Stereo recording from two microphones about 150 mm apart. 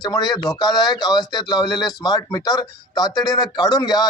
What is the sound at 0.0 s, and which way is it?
Speech, 30° left (ahead or behind).